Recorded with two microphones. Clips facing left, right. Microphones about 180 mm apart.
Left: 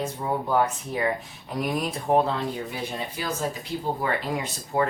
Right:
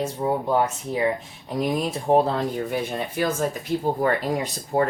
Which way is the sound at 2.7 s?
55° right (ahead or behind).